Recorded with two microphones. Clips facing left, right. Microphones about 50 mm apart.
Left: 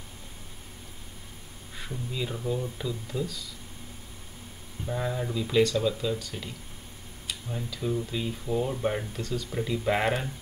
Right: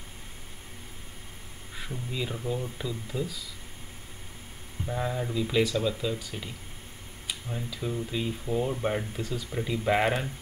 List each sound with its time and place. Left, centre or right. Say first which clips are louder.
1.8 s speech: even; centre
4.8 s speech: even; centre